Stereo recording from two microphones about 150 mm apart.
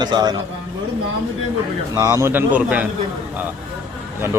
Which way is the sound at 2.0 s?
20° right (ahead or behind).